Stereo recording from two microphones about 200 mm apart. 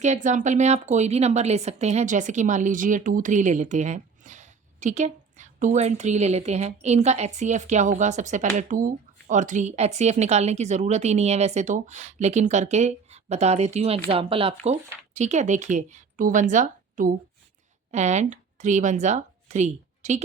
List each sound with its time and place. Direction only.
0.0 s a woman's voice: 35° right (ahead or behind)